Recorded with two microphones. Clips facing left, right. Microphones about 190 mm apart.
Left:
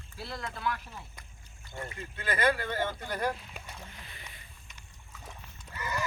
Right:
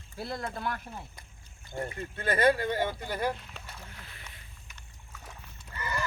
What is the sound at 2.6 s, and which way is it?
Speech, 15° right (ahead or behind).